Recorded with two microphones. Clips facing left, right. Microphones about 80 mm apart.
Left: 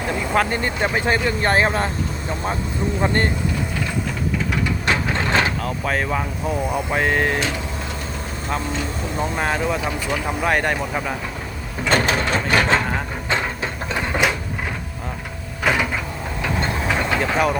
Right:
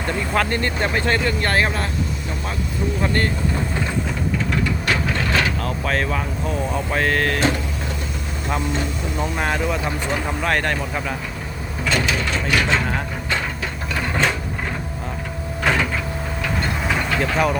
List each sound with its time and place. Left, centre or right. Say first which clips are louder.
0.1 s speech: left 1 dB; centre
3.0 s speech: left 2 dB; left
4.9 s printer: left 3 dB; left
5.6 s speech: even; centre
9.1 s speech: left 1 dB; centre
9.6 s speech: left 1 dB; centre
10.1 s speech: left 2 dB; centre
11.9 s mechanisms: left 3 dB; left
13.3 s a sound: left 2 dB; left
14.1 s sewing machine: even; centre
15.6 s a sound: even; centre
17.2 s speech: right 1 dB; centre